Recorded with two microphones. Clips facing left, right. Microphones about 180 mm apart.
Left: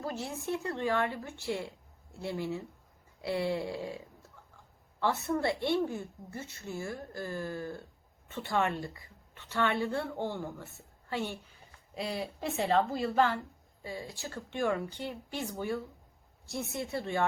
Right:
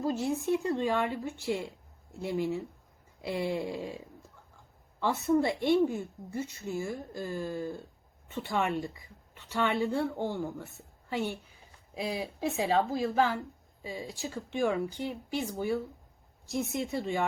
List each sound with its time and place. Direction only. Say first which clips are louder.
0.0 s a woman's voice: right 7 dB; 20° right (ahead or behind)
4.9 s a woman's voice: right 4 dB; 15° right (ahead or behind)